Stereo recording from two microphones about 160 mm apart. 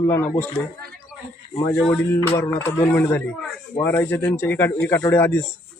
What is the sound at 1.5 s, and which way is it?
Speech, 20° left (ahead or behind).